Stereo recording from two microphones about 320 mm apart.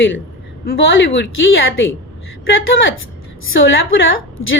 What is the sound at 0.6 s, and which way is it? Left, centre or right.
A woman's voice, left.